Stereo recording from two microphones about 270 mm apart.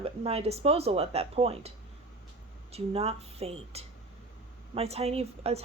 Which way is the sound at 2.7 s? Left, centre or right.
Right.